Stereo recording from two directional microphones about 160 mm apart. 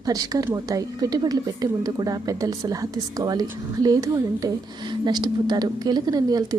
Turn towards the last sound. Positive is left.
turn(degrees=-25)  # may be behind; listen again after turning